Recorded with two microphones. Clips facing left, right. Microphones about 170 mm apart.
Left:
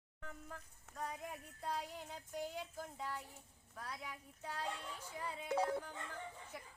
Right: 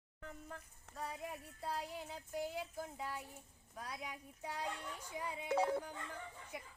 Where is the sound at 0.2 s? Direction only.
Centre (ahead or behind).